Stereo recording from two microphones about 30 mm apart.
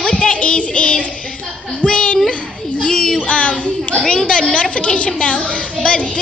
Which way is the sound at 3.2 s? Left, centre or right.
Left.